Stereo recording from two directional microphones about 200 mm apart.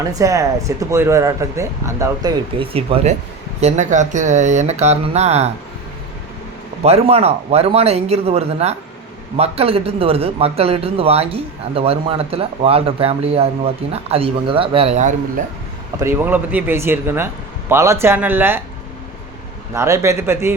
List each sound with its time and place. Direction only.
0.1 s speech: 15° right (ahead or behind)
2.6 s speech: 30° right (ahead or behind)
6.8 s speech: 30° right (ahead or behind)
16.0 s speech: 10° right (ahead or behind)
19.7 s speech: 15° right (ahead or behind)